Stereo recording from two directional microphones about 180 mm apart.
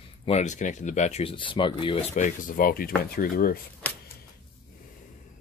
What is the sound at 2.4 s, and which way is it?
Speech, 50° left (ahead or behind).